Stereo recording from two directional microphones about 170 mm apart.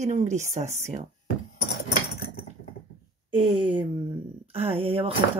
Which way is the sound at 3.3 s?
30° right (ahead or behind).